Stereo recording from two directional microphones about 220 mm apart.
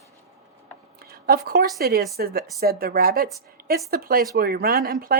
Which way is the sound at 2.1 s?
45° right (ahead or behind).